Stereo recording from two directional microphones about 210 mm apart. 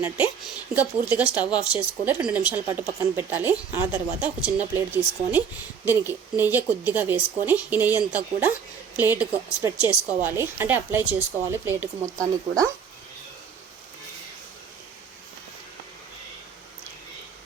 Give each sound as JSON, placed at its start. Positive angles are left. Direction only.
{"t": 0.0, "sound": "speech", "side_deg": -10}
{"t": 5.8, "sound": "speech", "side_deg": -10}